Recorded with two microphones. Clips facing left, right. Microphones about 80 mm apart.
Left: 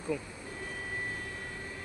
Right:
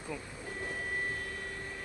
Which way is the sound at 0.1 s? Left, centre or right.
Centre.